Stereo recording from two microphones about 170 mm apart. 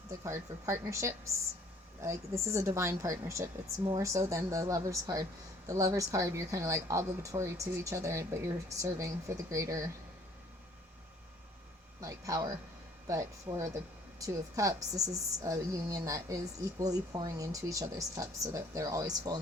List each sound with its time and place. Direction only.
0.2 s a woman's voice: 15° right (ahead or behind)
11.9 s a woman's voice: 20° right (ahead or behind)